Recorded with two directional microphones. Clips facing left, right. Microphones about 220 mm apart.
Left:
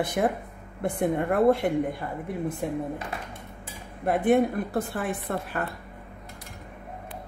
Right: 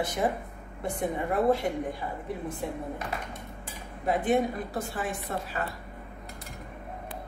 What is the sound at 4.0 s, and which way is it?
A woman's voice, 60° left (ahead or behind).